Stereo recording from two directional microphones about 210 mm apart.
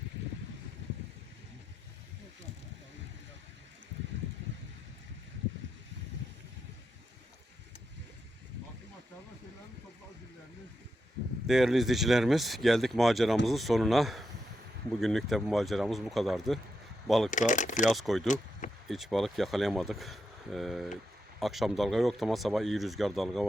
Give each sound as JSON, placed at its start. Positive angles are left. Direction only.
{"t": 11.4, "sound": "speech", "side_deg": 0}
{"t": 17.3, "sound": "speech", "side_deg": 35}
{"t": 17.8, "sound": "speech", "side_deg": 0}